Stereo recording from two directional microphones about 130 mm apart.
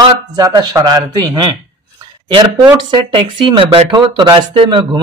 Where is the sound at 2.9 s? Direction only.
40° right (ahead or behind).